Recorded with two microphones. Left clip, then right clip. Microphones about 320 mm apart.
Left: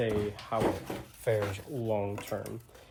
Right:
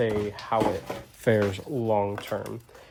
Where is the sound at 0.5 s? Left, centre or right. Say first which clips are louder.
Right 6 dB; right.